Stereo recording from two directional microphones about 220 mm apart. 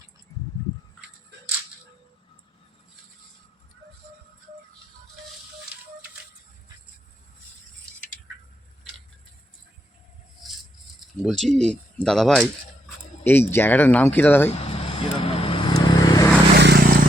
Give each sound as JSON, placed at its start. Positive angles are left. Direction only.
{"t": 11.2, "sound": "speech", "side_deg": 0}
{"t": 14.5, "sound": "vehicle", "side_deg": 25}
{"t": 16.6, "sound": "vehicle", "side_deg": -45}